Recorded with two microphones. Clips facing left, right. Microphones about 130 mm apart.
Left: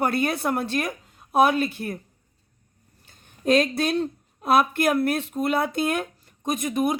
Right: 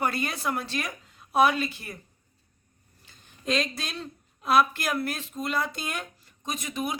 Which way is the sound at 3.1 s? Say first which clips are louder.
Left 9 dB; 55° left (ahead or behind).